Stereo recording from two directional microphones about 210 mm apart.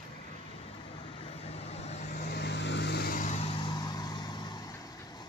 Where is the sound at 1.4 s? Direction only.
30° left (ahead or behind).